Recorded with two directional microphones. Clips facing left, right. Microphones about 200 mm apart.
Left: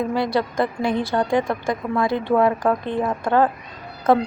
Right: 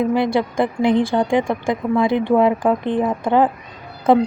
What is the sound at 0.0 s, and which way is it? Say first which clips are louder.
A woman's voice: right 4 dB; 20° right (ahead or behind).